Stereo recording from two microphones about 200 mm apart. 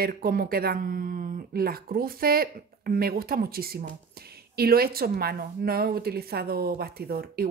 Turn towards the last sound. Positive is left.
turn(degrees=-50)  # may be behind; listen again after turning